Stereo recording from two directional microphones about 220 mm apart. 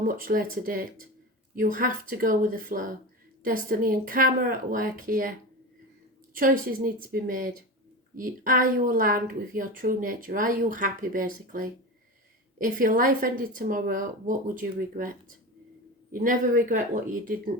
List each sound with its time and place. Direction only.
0.0 s speech: 40° right (ahead or behind)
6.3 s speech: 40° right (ahead or behind)
16.1 s speech: 40° right (ahead or behind)